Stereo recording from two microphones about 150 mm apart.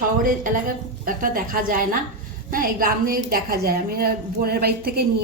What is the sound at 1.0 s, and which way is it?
A woman's voice, 65° right (ahead or behind).